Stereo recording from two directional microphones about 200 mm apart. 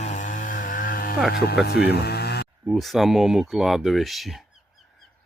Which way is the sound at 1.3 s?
50° left (ahead or behind).